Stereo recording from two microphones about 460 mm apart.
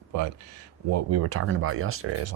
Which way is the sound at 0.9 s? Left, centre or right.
Right.